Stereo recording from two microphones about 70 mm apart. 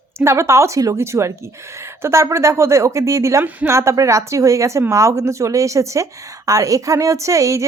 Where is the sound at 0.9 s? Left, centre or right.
Right.